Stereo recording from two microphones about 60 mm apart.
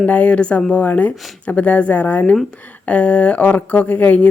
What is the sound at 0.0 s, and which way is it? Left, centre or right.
Speech, left.